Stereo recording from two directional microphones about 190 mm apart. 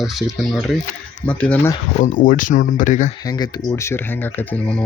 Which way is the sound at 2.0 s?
45° left (ahead or behind).